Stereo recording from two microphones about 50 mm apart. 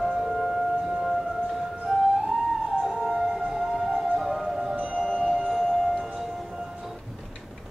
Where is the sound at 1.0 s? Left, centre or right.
Centre.